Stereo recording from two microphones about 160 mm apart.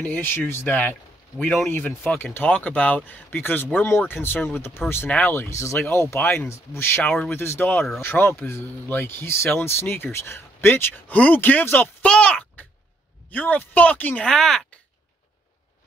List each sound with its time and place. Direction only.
0.0 s speech: 10° left (ahead or behind)